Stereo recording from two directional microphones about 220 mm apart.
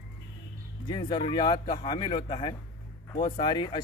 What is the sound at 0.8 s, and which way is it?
Speech, 20° left (ahead or behind).